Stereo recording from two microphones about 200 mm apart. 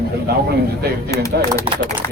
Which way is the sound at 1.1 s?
15° left (ahead or behind).